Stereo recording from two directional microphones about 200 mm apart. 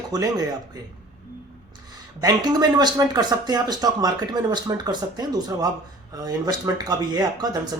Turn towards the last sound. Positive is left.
turn(degrees=-20)  # may be behind; listen again after turning